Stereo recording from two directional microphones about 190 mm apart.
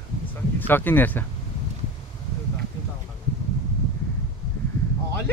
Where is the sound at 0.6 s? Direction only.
10° left (ahead or behind).